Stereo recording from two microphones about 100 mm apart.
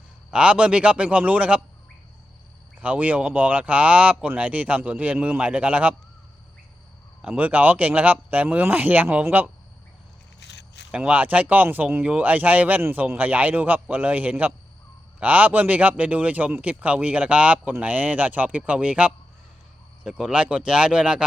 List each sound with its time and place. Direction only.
0.3 s speech: 10° right (ahead or behind)
2.8 s speech: 15° right (ahead or behind)
7.2 s speech: 15° right (ahead or behind)
10.9 s speech: 15° right (ahead or behind)